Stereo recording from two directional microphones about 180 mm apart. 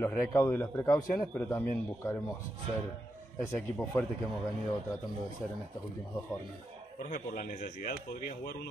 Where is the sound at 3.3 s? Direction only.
10° left (ahead or behind).